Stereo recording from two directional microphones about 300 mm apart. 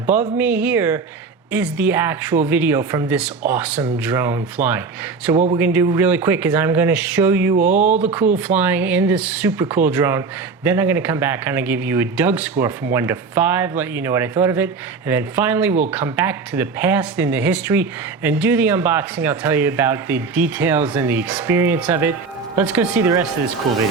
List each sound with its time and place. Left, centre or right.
0.1 s speech: centre
7.7 s speech: right
8.4 s speech: centre